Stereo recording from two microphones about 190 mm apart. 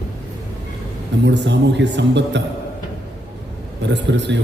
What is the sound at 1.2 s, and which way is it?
A man's voice, 70° right (ahead or behind).